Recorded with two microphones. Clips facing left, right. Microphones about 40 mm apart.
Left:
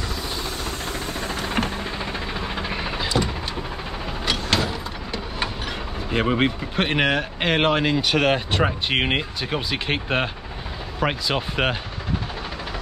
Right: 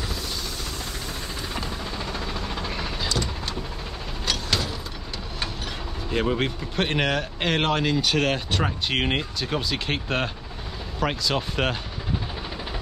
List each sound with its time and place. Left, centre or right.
0.4 s vehicle: left
1.3 s music: left
1.7 s vehicle: left
4.3 s a sound: left
6.0 s speech: left